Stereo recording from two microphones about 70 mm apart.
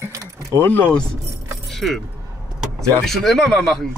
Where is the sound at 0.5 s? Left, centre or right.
Left.